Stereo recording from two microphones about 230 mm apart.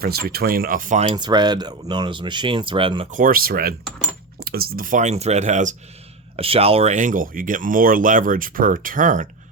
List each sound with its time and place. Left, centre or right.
0.0 s speech: right